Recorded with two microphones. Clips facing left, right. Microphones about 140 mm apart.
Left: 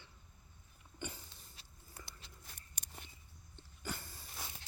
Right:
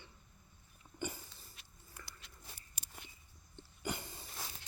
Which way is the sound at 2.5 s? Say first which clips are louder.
Even; 5° right (ahead or behind).